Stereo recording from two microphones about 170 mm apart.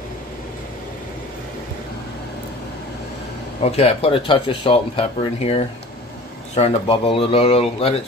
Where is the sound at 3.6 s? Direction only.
35° left (ahead or behind).